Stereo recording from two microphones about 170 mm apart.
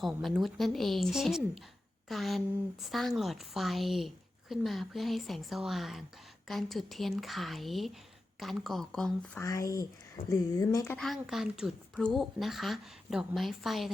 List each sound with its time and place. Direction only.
0.0 s a woman's voice: centre (ahead or behind)
9.4 s speech: 20° left (ahead or behind)
10.9 s a woman's voice: centre (ahead or behind)